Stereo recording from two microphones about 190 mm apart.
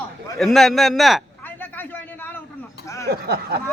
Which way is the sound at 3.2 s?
55° right (ahead or behind).